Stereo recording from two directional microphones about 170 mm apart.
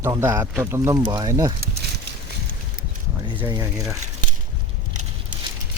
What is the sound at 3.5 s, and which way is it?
Speech, 20° right (ahead or behind).